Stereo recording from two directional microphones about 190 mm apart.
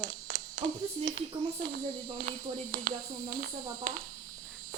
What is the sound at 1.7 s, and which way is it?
Speech, 45° right (ahead or behind).